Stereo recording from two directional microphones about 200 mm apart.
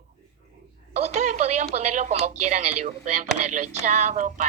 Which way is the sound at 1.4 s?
35° right (ahead or behind).